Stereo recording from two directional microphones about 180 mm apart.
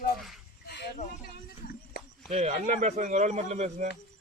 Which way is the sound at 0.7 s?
65° left (ahead or behind).